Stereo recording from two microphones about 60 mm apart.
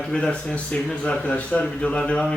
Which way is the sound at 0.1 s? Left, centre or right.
Centre.